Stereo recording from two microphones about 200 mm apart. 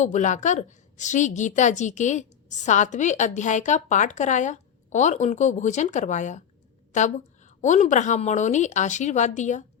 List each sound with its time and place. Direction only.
0.0 s a woman's voice: 40° left (ahead or behind)